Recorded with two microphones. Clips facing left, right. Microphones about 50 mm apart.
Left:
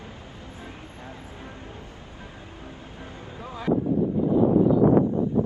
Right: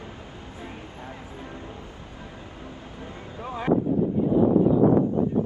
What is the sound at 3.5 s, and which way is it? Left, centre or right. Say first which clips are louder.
Speech: right 1 dB; right.